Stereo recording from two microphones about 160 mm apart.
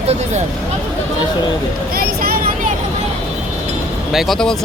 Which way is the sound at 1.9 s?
65° right (ahead or behind).